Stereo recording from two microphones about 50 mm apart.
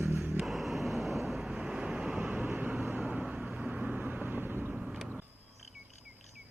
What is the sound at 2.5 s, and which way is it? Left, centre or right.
Vehicle, right.